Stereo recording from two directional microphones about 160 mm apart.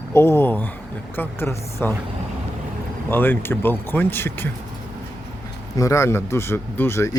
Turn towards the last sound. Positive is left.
turn(degrees=15)  # may be behind; listen again after turning